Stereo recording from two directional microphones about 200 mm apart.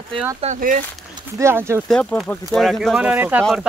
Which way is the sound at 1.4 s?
15° right (ahead or behind).